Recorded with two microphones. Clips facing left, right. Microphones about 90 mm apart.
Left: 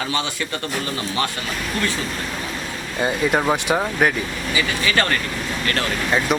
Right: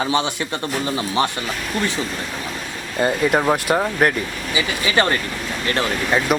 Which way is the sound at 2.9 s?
Centre (ahead or behind).